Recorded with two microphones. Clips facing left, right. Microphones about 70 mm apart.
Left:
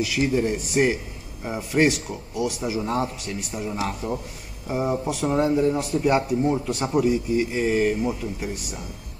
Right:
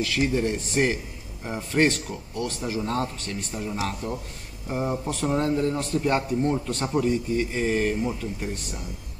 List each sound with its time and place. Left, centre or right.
0.0 s a man's voice: centre